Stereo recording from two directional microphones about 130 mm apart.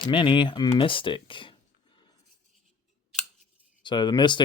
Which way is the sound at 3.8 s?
35° left (ahead or behind).